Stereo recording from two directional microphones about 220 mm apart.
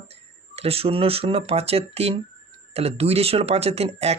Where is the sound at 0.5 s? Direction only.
25° right (ahead or behind).